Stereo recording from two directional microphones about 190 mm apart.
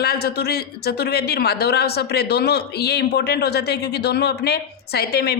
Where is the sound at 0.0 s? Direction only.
55° left (ahead or behind).